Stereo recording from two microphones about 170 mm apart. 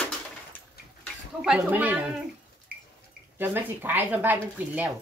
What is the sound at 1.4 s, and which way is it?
Speech, 5° right (ahead or behind).